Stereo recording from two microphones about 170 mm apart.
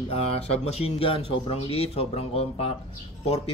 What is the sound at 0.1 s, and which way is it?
Speech, 35° left (ahead or behind).